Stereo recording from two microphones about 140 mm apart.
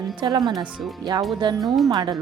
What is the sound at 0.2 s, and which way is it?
Speech, 30° right (ahead or behind).